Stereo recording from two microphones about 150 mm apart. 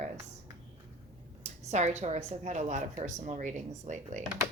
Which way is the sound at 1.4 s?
50° right (ahead or behind).